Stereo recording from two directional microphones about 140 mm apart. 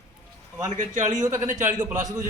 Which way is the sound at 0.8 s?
60° right (ahead or behind).